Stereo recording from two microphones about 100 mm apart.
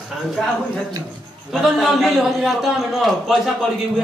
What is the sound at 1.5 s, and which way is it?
Speech, 5° right (ahead or behind).